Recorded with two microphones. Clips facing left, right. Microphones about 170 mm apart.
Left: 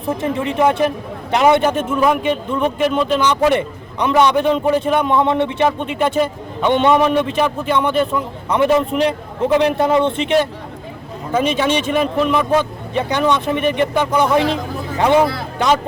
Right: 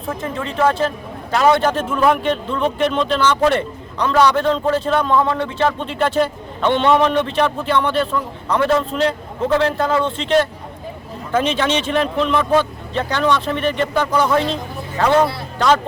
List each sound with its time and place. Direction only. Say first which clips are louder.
0.1 s a man's voice: left 5 dB; 20° left (ahead or behind)